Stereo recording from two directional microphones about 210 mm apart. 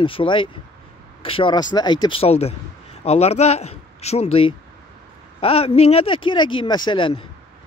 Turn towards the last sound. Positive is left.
turn(degrees=25)  # may be behind; listen again after turning